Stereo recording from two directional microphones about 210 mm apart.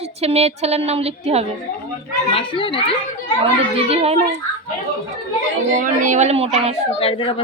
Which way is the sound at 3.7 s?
30° right (ahead or behind).